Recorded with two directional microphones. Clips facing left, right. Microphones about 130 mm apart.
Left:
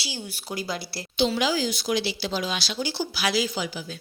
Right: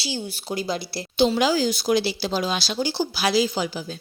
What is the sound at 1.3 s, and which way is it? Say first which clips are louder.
Speech: right 4 dB; 40° right (ahead or behind).